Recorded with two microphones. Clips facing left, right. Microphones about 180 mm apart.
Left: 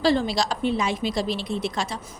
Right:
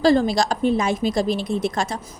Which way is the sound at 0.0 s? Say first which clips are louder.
Right 5 dB; 45° right (ahead or behind).